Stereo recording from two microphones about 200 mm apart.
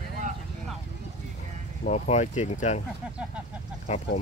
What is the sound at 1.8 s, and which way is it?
Speech, 35° left (ahead or behind).